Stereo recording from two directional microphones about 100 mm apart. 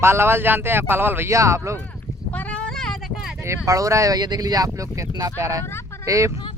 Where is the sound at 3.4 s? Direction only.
30° right (ahead or behind).